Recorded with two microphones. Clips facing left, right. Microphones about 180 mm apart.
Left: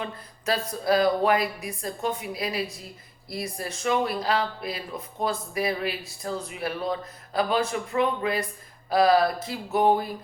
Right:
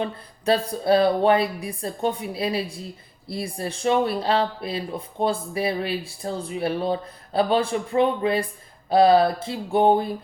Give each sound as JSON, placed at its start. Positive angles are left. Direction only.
{"t": 0.0, "sound": "speech", "side_deg": -30}